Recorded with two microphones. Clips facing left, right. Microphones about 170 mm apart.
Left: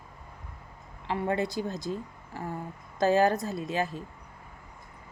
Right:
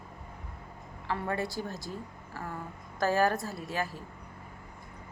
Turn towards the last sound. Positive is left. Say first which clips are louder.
# left 4 dB
turn(degrees=20)  # may be behind; listen again after turning